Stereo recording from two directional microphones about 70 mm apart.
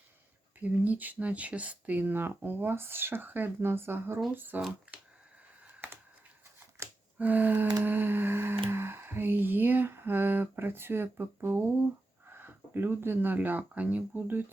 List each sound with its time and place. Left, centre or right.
0.6 s speech: right
7.2 s speech: right
7.8 s a sound: right
12.3 s speech: right